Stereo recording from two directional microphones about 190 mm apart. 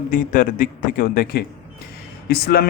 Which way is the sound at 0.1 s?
45° left (ahead or behind).